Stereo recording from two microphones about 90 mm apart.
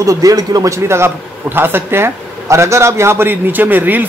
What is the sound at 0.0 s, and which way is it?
A man's voice, 40° right (ahead or behind).